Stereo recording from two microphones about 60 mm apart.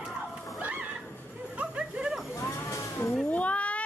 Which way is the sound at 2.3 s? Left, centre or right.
Left.